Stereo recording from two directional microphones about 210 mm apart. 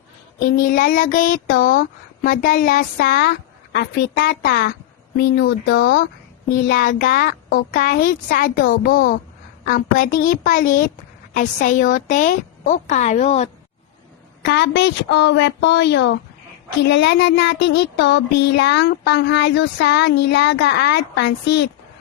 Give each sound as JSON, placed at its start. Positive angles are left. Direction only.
{"t": 0.5, "sound": "a woman's voice", "side_deg": 45}
{"t": 1.6, "sound": "child singing", "side_deg": 40}
{"t": 6.7, "sound": "child singing", "side_deg": 40}
{"t": 8.8, "sound": "a woman's voice", "side_deg": 40}
{"t": 14.4, "sound": "a woman's voice", "side_deg": 55}
{"t": 16.8, "sound": "child singing", "side_deg": 55}